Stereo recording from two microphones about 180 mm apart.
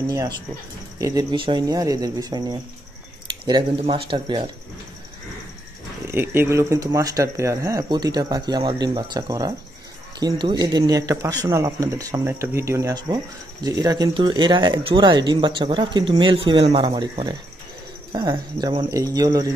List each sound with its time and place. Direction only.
0.9 s speech: 20° right (ahead or behind)
6.1 s speech: 10° right (ahead or behind)